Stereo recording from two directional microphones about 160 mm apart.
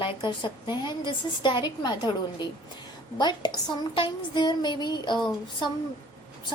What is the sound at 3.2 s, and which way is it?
A woman's voice, 25° left (ahead or behind).